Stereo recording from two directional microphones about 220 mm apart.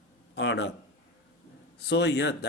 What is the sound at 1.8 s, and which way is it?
Speech, 50° left (ahead or behind).